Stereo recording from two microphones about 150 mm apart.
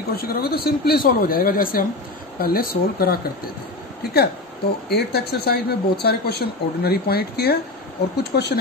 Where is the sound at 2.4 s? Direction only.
85° left.